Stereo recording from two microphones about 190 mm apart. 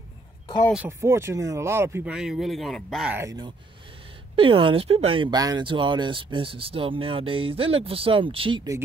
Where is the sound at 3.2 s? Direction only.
20° right (ahead or behind).